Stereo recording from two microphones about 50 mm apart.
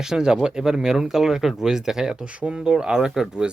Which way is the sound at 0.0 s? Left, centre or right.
Centre.